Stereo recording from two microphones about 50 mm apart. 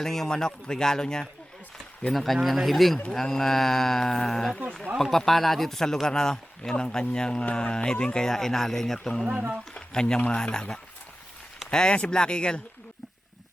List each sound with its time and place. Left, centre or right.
0.0 s speech: centre
2.0 s speech: centre